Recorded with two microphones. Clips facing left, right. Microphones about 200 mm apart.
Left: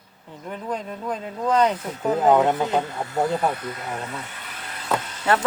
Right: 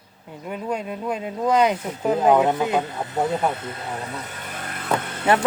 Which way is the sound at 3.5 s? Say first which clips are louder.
Left 1 dB; 25° right (ahead or behind).